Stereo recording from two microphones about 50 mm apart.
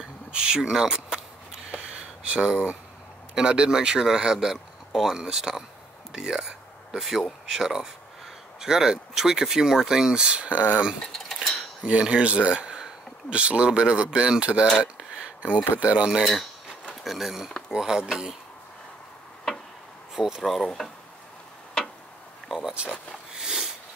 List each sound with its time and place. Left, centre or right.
0.3 s a sound: centre
3.3 s speech: centre
11.1 s cutlery: centre
12.0 s speech: right
14.8 s a sound: right
15.8 s speech: right
17.0 s speech: centre
20.2 s speech: centre
20.4 s speech: centre
22.5 s speech: centre
22.8 s a sound: centre